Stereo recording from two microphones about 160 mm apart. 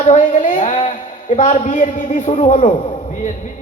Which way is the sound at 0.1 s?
50° left (ahead or behind).